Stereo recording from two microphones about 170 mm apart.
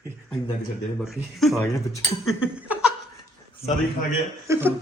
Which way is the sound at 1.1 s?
Centre (ahead or behind).